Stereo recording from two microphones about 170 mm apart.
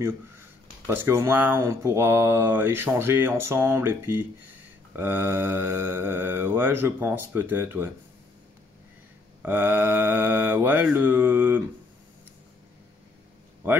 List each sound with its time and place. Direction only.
0.8 s speech: 15° right (ahead or behind)
9.4 s speech: 10° right (ahead or behind)
13.6 s speech: 10° right (ahead or behind)